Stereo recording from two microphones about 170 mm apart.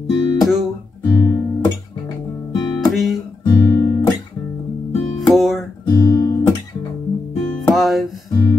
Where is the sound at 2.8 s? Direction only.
Centre (ahead or behind).